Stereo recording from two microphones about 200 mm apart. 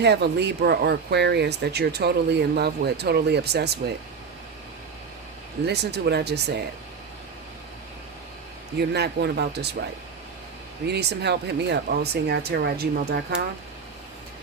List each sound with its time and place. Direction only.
0.0 s speech: 55° right (ahead or behind)
5.6 s speech: 55° right (ahead or behind)
8.9 s speech: 55° right (ahead or behind)
10.8 s speech: 55° right (ahead or behind)